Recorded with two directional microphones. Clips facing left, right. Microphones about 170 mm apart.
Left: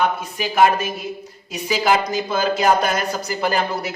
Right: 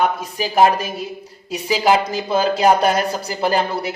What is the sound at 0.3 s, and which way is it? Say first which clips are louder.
Speech: right 1 dB; 35° right (ahead or behind).